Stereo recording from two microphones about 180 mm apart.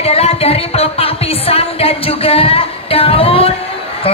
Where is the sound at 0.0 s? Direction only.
35° left (ahead or behind).